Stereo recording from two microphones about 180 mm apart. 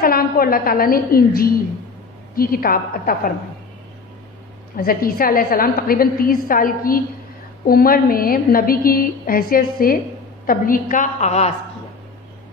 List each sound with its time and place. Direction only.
0.0 s a woman's voice: 55° left (ahead or behind)
4.7 s a woman's voice: 55° left (ahead or behind); by 11.5 s 40° left (ahead or behind)